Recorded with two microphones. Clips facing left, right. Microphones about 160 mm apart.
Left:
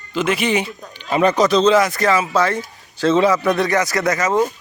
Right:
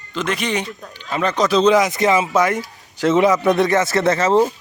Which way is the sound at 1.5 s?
10° right (ahead or behind).